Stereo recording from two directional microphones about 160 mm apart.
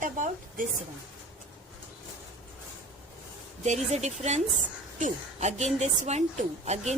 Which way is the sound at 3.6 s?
45° right (ahead or behind).